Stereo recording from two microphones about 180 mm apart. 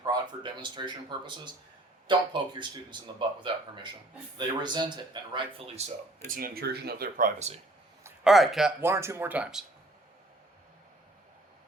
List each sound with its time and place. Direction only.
0.0 s speech: 25° right (ahead or behind)
6.2 s speech: 50° right (ahead or behind)
8.2 s speech: centre (ahead or behind)
8.8 s speech: 15° right (ahead or behind)